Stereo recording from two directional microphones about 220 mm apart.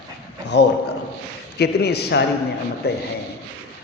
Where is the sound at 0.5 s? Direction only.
50° left (ahead or behind).